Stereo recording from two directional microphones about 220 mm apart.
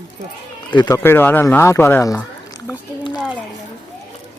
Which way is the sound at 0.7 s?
15° left (ahead or behind).